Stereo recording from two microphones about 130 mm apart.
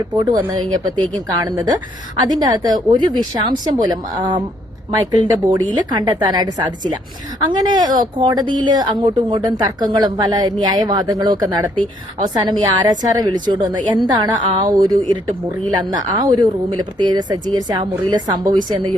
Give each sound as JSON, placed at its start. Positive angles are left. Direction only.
{"t": 0.5, "sound": "speech", "side_deg": -35}